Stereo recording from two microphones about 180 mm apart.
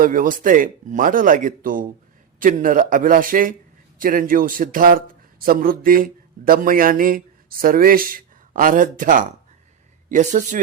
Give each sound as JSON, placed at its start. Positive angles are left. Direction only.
{"t": 0.0, "sound": "a man's voice", "side_deg": -50}